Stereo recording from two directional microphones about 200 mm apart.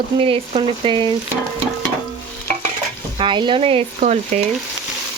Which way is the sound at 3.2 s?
25° right (ahead or behind).